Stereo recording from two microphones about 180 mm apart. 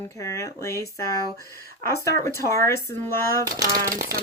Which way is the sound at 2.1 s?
15° left (ahead or behind).